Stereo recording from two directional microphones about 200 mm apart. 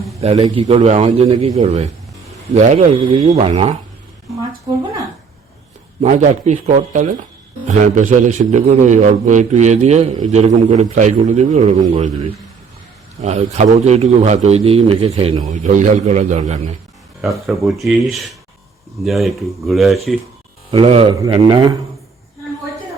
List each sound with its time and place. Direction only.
0.2 s a man's voice: 30° right (ahead or behind)
6.0 s a man's voice: 35° right (ahead or behind)
13.2 s a man's voice: 35° right (ahead or behind)
17.2 s speech: centre (ahead or behind)
20.7 s a man's voice: 30° right (ahead or behind)